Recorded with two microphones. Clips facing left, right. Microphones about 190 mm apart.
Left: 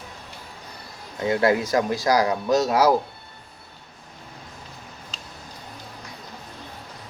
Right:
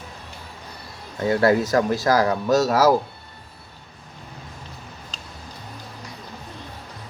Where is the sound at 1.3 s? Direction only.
20° left (ahead or behind).